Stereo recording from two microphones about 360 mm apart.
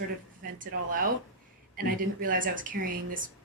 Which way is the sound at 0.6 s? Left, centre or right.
Right.